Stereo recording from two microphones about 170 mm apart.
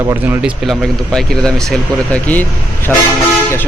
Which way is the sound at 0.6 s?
Centre (ahead or behind).